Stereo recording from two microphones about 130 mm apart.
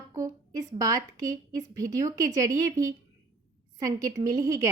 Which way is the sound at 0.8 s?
30° right (ahead or behind).